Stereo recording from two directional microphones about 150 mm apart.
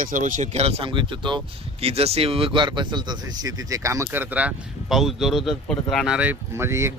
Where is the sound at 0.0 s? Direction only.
60° right (ahead or behind); by 6.1 s 5° left (ahead or behind).